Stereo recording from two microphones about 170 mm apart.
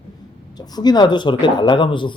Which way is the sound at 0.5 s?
25° left (ahead or behind).